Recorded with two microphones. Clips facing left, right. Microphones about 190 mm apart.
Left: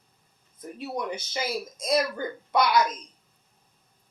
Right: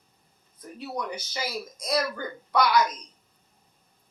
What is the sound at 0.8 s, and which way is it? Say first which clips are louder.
Speech: left 1 dB; 25° left (ahead or behind).